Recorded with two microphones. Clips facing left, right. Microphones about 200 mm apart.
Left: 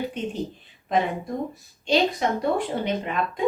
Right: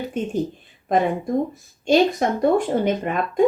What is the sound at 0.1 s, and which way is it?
Speech, 45° right (ahead or behind).